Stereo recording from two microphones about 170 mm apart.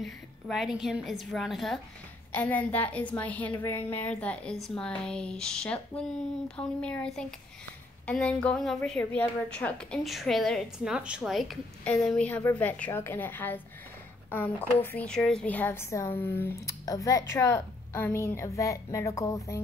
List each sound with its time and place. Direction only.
0.0 s a woman's voice: centre (ahead or behind); by 19.6 s 20° left (ahead or behind)